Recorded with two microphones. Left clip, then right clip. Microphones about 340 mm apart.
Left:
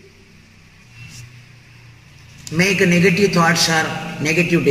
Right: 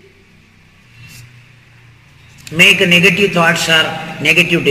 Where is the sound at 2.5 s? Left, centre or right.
Centre.